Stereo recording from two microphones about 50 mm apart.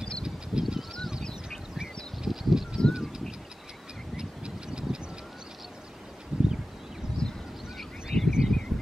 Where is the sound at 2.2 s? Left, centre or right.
Centre.